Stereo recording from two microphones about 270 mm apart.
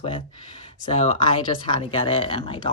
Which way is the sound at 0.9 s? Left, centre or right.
Centre.